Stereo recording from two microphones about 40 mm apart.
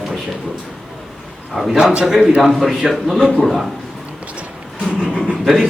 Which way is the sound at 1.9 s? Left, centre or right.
Centre.